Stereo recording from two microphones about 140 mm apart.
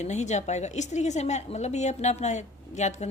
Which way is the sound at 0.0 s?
55° left (ahead or behind).